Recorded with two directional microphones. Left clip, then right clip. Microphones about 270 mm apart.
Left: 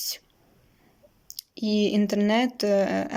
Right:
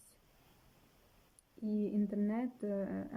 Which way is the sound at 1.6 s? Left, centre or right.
Left.